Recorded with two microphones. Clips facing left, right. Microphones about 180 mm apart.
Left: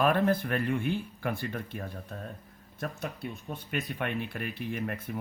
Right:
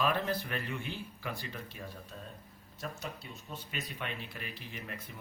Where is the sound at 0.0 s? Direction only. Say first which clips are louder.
Left 7 dB; 50° left (ahead or behind).